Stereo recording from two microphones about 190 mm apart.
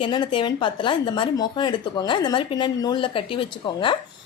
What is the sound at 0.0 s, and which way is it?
A woman's voice, 25° left (ahead or behind).